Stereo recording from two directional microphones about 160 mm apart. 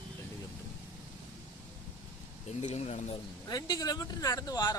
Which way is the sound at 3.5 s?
25° left (ahead or behind).